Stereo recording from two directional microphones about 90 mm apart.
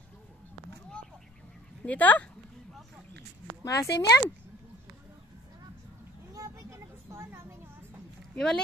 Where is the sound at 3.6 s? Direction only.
40° left (ahead or behind).